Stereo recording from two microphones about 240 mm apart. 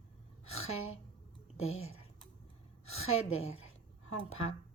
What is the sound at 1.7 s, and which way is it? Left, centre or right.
A woman's voice, left.